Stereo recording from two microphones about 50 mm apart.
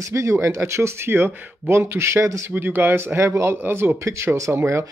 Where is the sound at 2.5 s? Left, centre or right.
Right.